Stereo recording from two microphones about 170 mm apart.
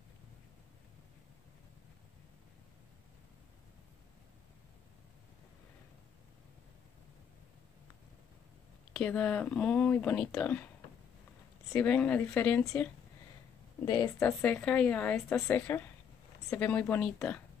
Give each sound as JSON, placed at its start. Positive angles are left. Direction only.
{"t": 8.9, "sound": "speech", "side_deg": 5}
{"t": 11.8, "sound": "speech", "side_deg": 5}
{"t": 13.8, "sound": "a woman's voice", "side_deg": 25}
{"t": 14.2, "sound": "speech", "side_deg": 5}